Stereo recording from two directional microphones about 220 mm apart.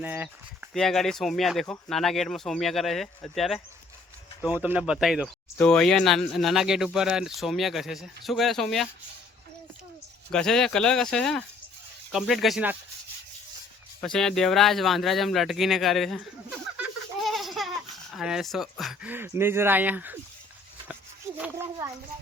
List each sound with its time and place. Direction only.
0.0 s speech: 10° right (ahead or behind)
10.3 s speech: centre (ahead or behind)
14.0 s speech: centre (ahead or behind)
17.2 s speech: centre (ahead or behind)
21.3 s speech: 5° right (ahead or behind)